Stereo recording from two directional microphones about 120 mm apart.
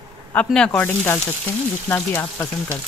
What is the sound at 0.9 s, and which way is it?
Speech, 20° left (ahead or behind).